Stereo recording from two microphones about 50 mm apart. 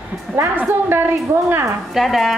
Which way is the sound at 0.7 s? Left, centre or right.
Right.